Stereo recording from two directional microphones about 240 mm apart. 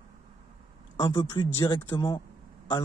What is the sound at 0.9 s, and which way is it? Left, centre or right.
Speech, centre.